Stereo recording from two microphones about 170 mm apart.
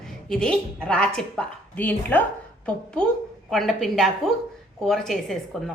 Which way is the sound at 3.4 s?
Centre (ahead or behind).